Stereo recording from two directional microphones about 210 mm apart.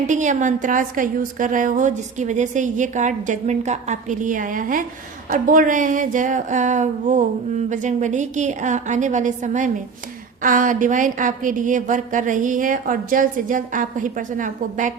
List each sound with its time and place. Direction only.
0.1 s a woman's voice: 35° right (ahead or behind)